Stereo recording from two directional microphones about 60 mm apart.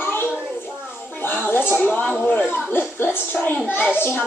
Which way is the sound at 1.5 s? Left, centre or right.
Left.